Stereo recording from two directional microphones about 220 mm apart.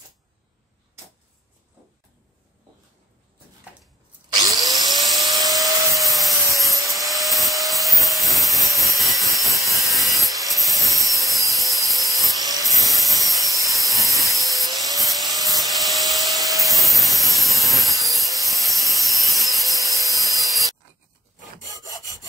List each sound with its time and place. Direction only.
4.3 s drill: 15° right (ahead or behind)
5.1 s vacuum cleaner: centre (ahead or behind)
5.6 s rub: centre (ahead or behind)
11.5 s a sound: centre (ahead or behind)
12.6 s wood: centre (ahead or behind)
15.0 s rub: centre (ahead or behind)
19.8 s wood: centre (ahead or behind)